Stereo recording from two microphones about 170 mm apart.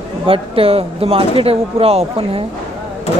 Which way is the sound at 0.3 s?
35° right (ahead or behind).